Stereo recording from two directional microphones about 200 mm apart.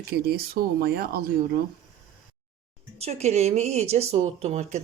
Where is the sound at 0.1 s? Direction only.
50° right (ahead or behind).